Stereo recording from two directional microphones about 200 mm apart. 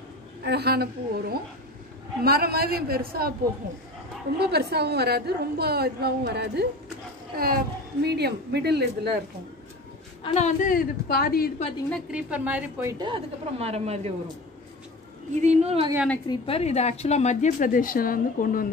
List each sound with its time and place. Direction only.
0.4 s a woman's voice: 55° right (ahead or behind)
4.4 s a woman's voice: 55° right (ahead or behind)
10.2 s a woman's voice: 35° left (ahead or behind)
11.9 s a woman's voice: 5° right (ahead or behind)
13.0 s a woman's voice: 25° right (ahead or behind)
15.4 s a woman's voice: 30° right (ahead or behind)
16.3 s a woman's voice: 30° left (ahead or behind); by 18.7 s 45° left (ahead or behind)